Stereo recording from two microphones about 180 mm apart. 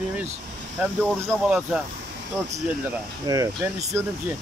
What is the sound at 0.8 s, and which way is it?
Speech, 5° right (ahead or behind).